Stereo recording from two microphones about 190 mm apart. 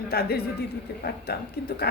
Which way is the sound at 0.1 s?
55° left (ahead or behind).